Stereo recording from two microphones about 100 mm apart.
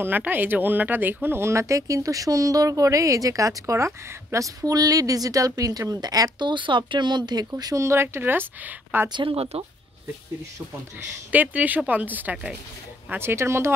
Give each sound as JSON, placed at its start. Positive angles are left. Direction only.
{"t": 0.0, "sound": "speech", "side_deg": -20}
{"t": 6.5, "sound": "speech", "side_deg": -55}
{"t": 7.8, "sound": "speech", "side_deg": -25}
{"t": 9.1, "sound": "speech", "side_deg": -65}
{"t": 11.3, "sound": "speech", "side_deg": -15}